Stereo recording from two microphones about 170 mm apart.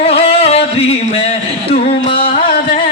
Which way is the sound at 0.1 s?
35° left (ahead or behind).